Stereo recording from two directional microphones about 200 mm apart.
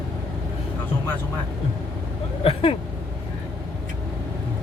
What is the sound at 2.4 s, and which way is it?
Speech, 30° left (ahead or behind).